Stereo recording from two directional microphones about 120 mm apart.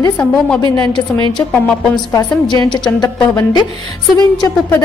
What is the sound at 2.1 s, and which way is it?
A woman's voice, 35° left (ahead or behind).